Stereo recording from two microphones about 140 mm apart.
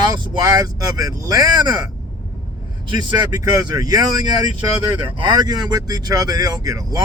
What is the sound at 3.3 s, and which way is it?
A man's voice, 30° right (ahead or behind).